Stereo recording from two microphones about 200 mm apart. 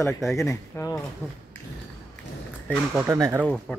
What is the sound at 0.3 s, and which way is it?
Speech, 15° left (ahead or behind).